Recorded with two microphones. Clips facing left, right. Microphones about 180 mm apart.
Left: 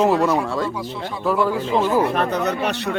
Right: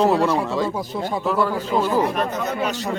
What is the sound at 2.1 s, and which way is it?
Speech, 65° left (ahead or behind).